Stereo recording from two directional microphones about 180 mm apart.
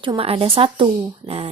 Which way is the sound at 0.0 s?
30° right (ahead or behind).